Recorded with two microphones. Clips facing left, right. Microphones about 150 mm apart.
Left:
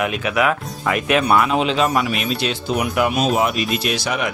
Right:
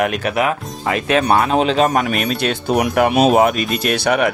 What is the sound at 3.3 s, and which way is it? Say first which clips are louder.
Speech: right 5 dB; 50° right (ahead or behind).